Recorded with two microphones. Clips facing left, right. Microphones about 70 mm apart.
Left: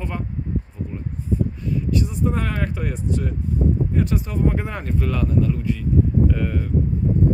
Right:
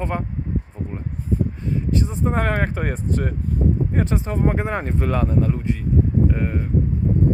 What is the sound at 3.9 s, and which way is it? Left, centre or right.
Speech, right.